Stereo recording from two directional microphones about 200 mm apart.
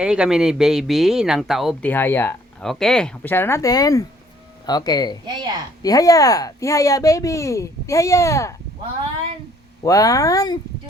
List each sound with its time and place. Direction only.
0.0 s speech: 5° right (ahead or behind); by 5.1 s 20° left (ahead or behind)
5.2 s a woman's voice: 20° right (ahead or behind)
5.8 s speech: 15° left (ahead or behind)
9.8 s speech: 15° left (ahead or behind)